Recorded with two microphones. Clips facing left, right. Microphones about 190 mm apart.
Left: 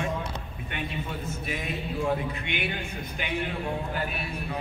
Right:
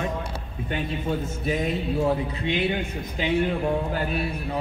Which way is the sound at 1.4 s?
30° right (ahead or behind).